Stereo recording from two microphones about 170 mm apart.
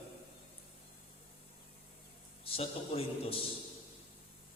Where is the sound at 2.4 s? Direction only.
35° left (ahead or behind).